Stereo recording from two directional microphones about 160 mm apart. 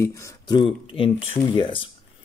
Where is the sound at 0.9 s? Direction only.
35° left (ahead or behind).